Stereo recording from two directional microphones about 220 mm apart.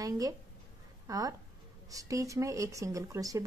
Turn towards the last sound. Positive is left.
turn(degrees=-15)  # may be behind; listen again after turning